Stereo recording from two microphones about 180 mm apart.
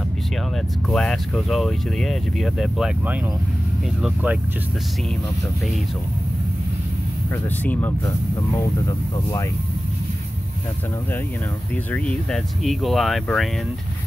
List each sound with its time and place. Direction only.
0.8 s speech: centre (ahead or behind)
7.4 s speech: 10° left (ahead or behind)
11.7 s speech: 10° left (ahead or behind)